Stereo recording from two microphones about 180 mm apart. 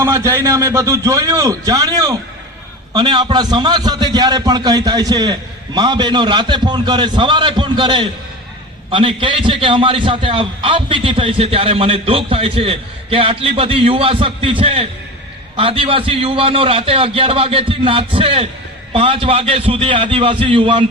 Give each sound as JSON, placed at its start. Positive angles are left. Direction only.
{"t": 0.0, "sound": "a man's voice", "side_deg": -15}